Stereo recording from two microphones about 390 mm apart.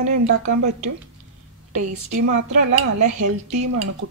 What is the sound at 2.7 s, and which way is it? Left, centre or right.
Speech, right.